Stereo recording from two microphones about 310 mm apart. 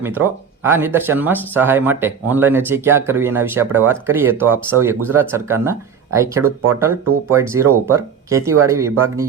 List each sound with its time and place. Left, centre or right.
0.0 s speech: centre
6.7 s speech: centre